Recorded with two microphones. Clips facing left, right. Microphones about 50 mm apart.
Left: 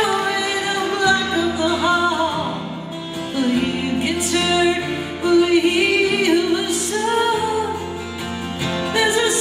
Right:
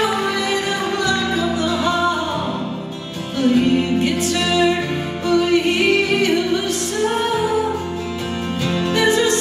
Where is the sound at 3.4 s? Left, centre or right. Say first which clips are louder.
Right 5 dB; centre.